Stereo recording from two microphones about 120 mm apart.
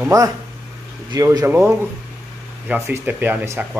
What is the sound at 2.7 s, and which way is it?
Speech, 15° right (ahead or behind).